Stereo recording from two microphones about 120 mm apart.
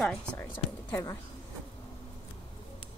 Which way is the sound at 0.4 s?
25° left (ahead or behind).